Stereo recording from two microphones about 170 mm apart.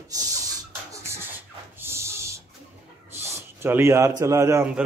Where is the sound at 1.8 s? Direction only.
15° right (ahead or behind).